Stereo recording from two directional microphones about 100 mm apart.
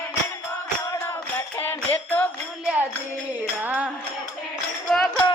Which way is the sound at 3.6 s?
15° right (ahead or behind).